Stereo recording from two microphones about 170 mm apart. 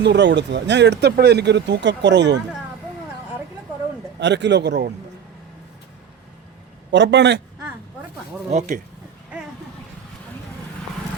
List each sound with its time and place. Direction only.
0.0 s speech: 90° right
4.2 s speech: 90° right
6.9 s speech: 90° right
8.4 s speech: 45° right (ahead or behind)